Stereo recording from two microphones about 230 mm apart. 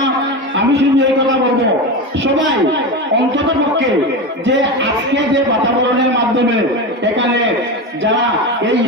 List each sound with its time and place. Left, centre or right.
0.6 s a man's voice: right